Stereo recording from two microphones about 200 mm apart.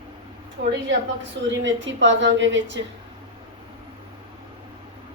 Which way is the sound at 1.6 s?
65° right (ahead or behind).